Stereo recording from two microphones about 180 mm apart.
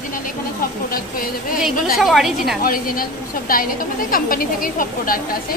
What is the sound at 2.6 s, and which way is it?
A woman's voice, 50° left (ahead or behind).